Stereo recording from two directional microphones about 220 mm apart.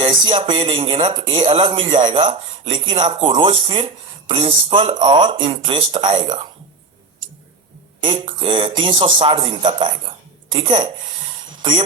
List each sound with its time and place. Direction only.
0.0 s speech: 20° right (ahead or behind)
8.0 s speech: 25° right (ahead or behind)
11.5 s a sound: 20° right (ahead or behind)